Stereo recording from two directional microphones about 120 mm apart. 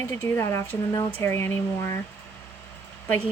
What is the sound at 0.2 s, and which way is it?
Speech, 20° left (ahead or behind).